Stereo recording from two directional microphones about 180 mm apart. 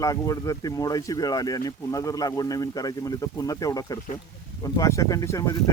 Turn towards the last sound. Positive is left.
turn(degrees=15)  # may be behind; listen again after turning